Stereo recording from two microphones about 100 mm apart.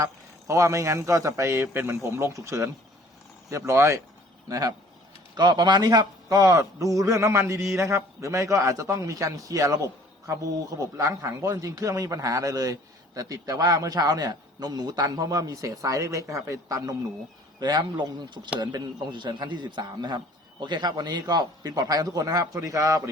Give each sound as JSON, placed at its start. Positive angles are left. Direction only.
{"t": 0.0, "sound": "a man's voice", "side_deg": -30}
{"t": 5.3, "sound": "a man's voice", "side_deg": -45}
{"t": 17.6, "sound": "a man's voice", "side_deg": -45}